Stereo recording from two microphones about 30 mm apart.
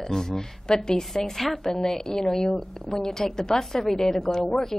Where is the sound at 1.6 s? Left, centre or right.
Centre.